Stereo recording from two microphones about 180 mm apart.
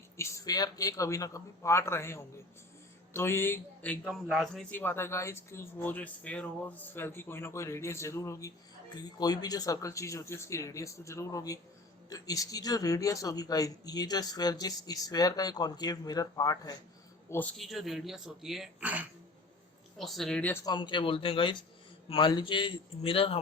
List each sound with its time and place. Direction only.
0.2 s a man's voice: 15° left (ahead or behind)
17.6 s speech: centre (ahead or behind)
20.7 s speech: 25° left (ahead or behind)